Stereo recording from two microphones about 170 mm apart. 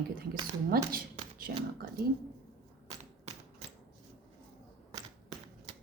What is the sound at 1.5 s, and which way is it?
Speech, 70° right (ahead or behind).